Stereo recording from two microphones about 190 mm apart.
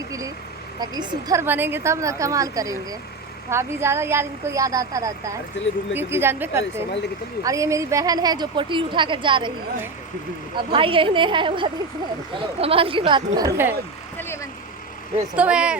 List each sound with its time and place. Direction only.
0.8 s a woman's voice: 20° right (ahead or behind)
10.6 s a woman's voice: 25° right (ahead or behind)
15.4 s speech: 5° right (ahead or behind)